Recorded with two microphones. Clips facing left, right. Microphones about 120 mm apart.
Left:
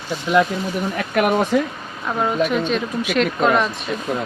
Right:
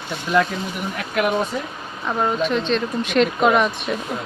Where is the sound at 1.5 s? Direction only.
90° left.